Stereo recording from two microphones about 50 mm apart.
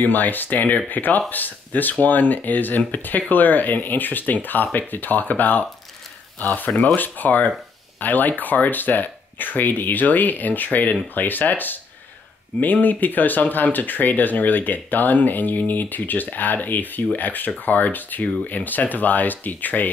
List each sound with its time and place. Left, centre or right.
0.0 s speech: left